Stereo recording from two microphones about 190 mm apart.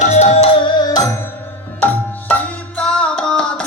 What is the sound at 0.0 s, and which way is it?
Music, 35° left (ahead or behind).